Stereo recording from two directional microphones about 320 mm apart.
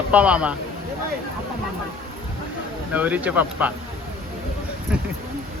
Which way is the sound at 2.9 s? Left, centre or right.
Centre.